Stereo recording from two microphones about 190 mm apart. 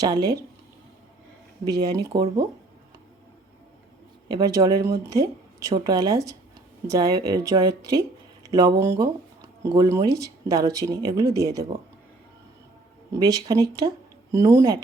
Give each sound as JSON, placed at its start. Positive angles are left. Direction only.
{"t": 0.0, "sound": "speech", "side_deg": -20}
{"t": 1.8, "sound": "speech", "side_deg": -20}
{"t": 4.3, "sound": "speech", "side_deg": -20}
{"t": 13.1, "sound": "speech", "side_deg": -20}